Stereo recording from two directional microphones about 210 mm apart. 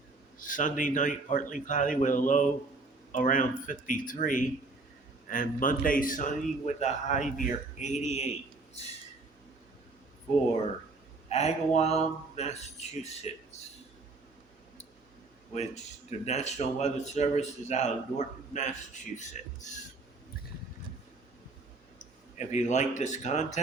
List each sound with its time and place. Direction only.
0.3 s speech: 40° left (ahead or behind)
11.3 s speech: 30° left (ahead or behind)
16.2 s speech: 30° left (ahead or behind)
22.4 s speech: 35° left (ahead or behind)